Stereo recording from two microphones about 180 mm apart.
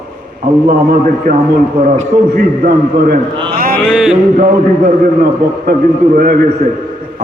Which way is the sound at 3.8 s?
5° right (ahead or behind).